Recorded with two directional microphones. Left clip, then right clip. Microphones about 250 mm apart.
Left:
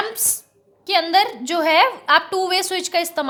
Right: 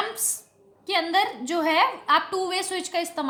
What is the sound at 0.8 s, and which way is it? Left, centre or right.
A woman's voice, left.